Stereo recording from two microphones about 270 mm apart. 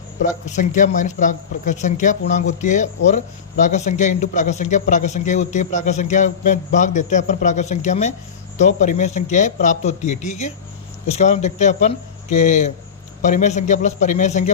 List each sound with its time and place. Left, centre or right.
0.4 s a man's voice: left